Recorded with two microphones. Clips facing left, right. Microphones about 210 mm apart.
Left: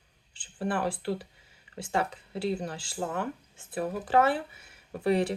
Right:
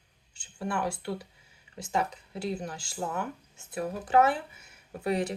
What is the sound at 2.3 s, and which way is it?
Speech, 30° left (ahead or behind).